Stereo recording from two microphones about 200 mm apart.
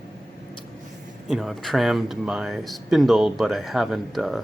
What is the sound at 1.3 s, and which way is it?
Speech, centre (ahead or behind).